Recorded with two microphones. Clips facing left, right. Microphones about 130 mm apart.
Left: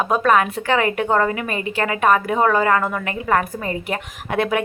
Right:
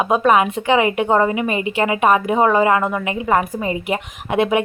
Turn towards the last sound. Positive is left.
turn(degrees=-15)  # may be behind; listen again after turning